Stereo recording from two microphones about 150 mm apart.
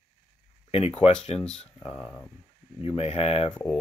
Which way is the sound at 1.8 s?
30° left (ahead or behind).